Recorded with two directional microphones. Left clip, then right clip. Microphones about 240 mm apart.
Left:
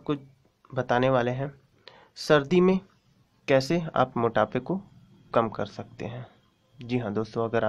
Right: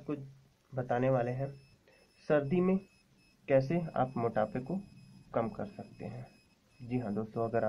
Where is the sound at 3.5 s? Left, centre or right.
Left.